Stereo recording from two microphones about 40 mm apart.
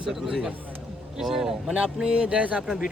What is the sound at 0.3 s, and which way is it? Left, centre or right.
A man's voice, centre.